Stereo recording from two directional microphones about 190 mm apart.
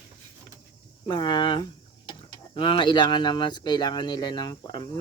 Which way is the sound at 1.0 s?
20° left (ahead or behind).